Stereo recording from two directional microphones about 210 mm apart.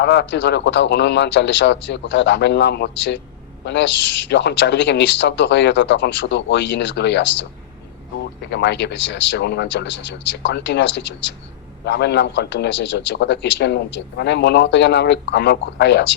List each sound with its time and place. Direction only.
0.0 s a man's voice: 55° left (ahead or behind)
8.4 s a man's voice: 55° left (ahead or behind)